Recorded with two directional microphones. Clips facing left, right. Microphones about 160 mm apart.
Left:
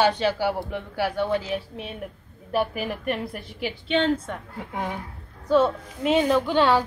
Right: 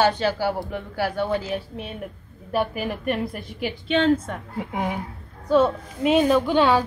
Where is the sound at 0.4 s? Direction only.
10° left (ahead or behind).